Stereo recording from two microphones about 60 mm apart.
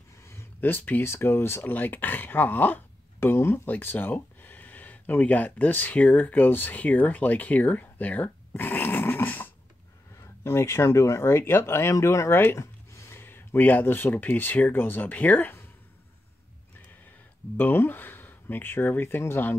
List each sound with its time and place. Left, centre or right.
0.6 s speech: left
1.0 s speech: left
1.7 s speech: left
3.2 s speech: left
3.6 s speech: left
8.6 s dog: left
10.4 s speech: left
11.9 s speech: left
12.5 s a sound: left
13.1 s speech: left
17.6 s speech: left